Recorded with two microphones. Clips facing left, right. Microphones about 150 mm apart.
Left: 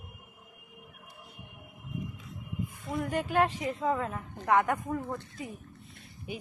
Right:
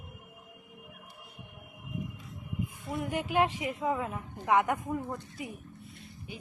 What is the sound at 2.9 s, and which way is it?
A woman's voice, 15° right (ahead or behind).